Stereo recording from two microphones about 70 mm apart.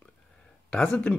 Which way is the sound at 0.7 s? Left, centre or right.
Centre.